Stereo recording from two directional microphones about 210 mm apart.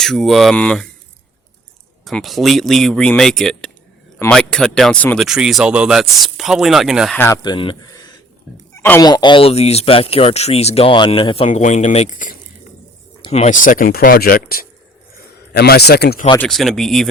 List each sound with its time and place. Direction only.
0.0 s speech: centre (ahead or behind)
2.0 s speech: centre (ahead or behind)
7.2 s speech: 15° left (ahead or behind); by 16.2 s 50° left (ahead or behind)
16.4 s speech: centre (ahead or behind)